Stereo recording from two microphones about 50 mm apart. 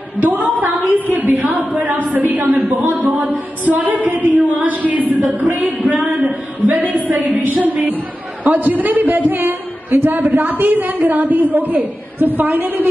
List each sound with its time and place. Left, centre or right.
0.2 s a woman's voice: right